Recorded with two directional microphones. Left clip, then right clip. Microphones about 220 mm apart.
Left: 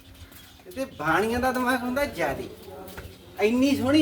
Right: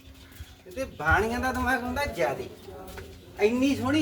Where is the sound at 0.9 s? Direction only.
5° left (ahead or behind).